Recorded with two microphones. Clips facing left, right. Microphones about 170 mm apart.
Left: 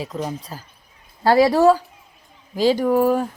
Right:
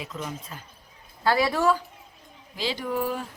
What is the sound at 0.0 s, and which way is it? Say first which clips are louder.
Speech: left 8 dB; 35° left (ahead or behind).